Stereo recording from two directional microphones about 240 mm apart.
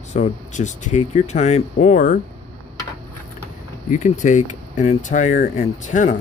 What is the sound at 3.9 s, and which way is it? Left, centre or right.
Speech, left.